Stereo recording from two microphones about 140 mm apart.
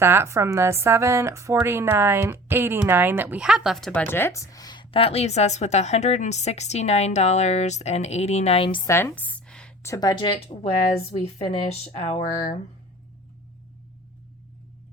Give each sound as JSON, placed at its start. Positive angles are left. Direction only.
{"t": 0.0, "sound": "a woman's voice", "side_deg": -20}
{"t": 3.9, "sound": "a woman's voice", "side_deg": 15}
{"t": 8.9, "sound": "a sound", "side_deg": 15}
{"t": 9.8, "sound": "a woman's voice", "side_deg": 25}